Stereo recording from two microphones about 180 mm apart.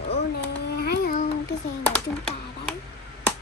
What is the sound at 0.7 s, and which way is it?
Babbling, 60° left (ahead or behind).